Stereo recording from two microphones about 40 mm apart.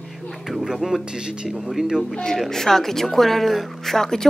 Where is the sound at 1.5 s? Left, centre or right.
Centre.